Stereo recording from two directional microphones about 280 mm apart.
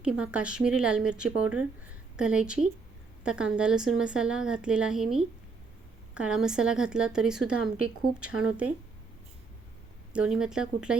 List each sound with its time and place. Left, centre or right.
0.0 s a woman's voice: centre
10.1 s a woman's voice: centre